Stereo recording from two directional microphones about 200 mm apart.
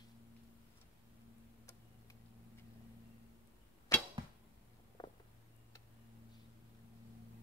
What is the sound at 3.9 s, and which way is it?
Arrow, 10° left (ahead or behind).